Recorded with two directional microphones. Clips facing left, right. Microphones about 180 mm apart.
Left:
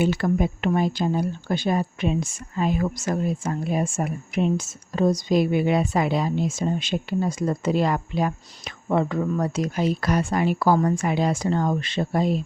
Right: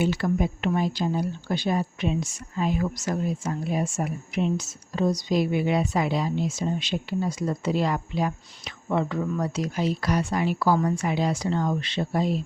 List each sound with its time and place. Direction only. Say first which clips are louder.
0.0 s speech: left 2 dB; 55° left (ahead or behind)